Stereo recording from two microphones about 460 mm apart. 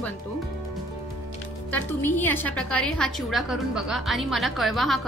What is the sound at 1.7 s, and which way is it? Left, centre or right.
A woman's voice, centre.